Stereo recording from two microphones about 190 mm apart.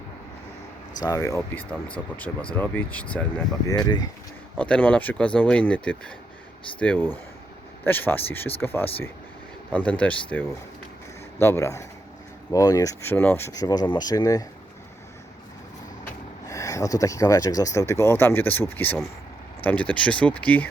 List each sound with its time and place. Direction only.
1.0 s speech: 15° left (ahead or behind)
3.7 s speech: 20° left (ahead or behind)
4.5 s speech: 5° left (ahead or behind)
11.3 s speech: 15° left (ahead or behind)
16.5 s speech: 15° left (ahead or behind)